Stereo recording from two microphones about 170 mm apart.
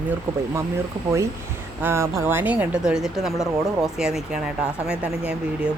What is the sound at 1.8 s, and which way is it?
Speech, 15° right (ahead or behind).